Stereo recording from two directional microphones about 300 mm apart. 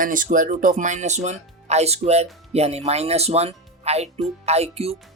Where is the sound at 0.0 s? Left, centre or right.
Right.